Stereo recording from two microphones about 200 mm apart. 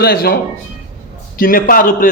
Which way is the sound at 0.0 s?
50° left (ahead or behind).